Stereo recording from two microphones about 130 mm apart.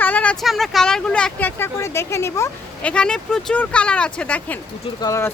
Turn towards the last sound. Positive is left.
turn(degrees=25)  # may be behind; listen again after turning